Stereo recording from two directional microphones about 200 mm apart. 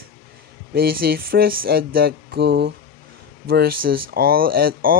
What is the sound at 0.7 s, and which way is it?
Speech, 50° right (ahead or behind).